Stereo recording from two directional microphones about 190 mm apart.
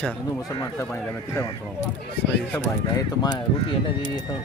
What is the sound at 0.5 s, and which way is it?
Speech, 20° left (ahead or behind).